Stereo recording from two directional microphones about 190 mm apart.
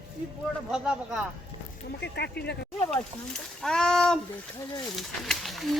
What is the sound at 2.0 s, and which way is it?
Speech, 60° left (ahead or behind).